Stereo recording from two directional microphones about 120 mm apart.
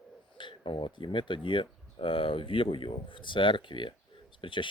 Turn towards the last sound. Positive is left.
turn(degrees=45)  # may be behind; listen again after turning